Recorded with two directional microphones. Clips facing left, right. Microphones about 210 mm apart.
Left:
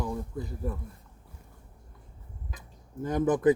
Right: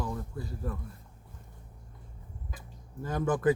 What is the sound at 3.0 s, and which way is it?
Speech, 20° left (ahead or behind).